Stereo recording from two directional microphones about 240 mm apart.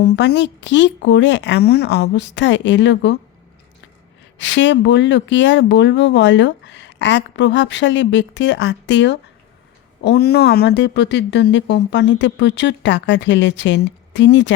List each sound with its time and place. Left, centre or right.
0.0 s speech: left
4.4 s speech: left